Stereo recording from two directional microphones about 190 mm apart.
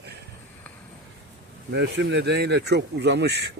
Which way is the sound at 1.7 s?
65° right (ahead or behind).